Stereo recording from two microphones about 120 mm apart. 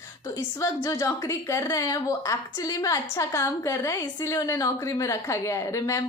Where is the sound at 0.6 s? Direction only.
30° left (ahead or behind).